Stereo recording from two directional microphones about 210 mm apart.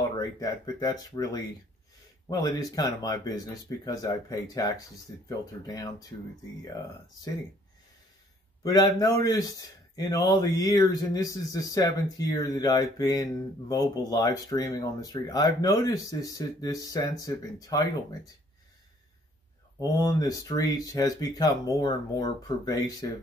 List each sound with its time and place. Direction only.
0.1 s speech: 20° left (ahead or behind)
8.6 s speech: 20° left (ahead or behind)
19.8 s speech: 15° left (ahead or behind)